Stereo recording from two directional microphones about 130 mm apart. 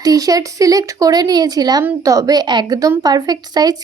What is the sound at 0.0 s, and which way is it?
Speech, 30° right (ahead or behind).